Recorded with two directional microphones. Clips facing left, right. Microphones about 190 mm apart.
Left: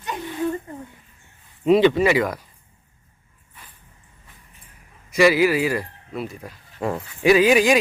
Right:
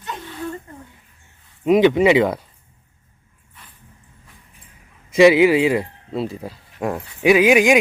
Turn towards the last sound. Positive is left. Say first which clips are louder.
# right 2 dB
turn(degrees=-15)  # may be behind; listen again after turning